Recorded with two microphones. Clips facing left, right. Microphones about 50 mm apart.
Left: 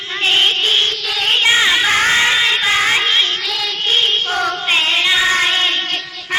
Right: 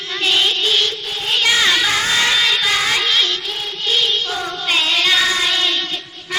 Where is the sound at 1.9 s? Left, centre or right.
Left.